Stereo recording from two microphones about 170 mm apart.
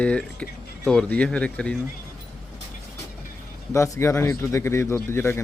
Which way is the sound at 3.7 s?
15° left (ahead or behind).